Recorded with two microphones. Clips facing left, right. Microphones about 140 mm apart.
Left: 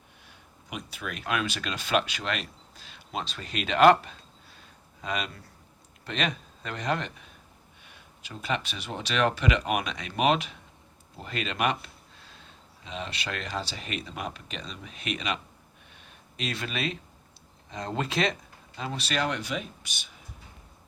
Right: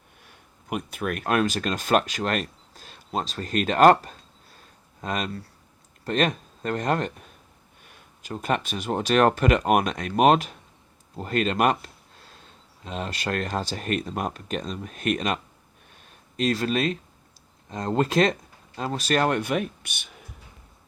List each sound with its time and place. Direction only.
0.3 s speech: 50° right (ahead or behind)
16.0 s a sound: 40° right (ahead or behind)
17.7 s speech: 45° right (ahead or behind); by 20.1 s 60° right (ahead or behind)